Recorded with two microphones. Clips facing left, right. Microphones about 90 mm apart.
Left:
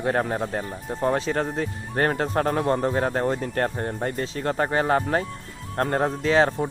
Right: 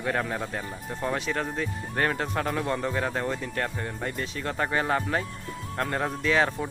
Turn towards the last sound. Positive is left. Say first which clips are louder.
# left 4 dB
turn(degrees=35)  # may be behind; listen again after turning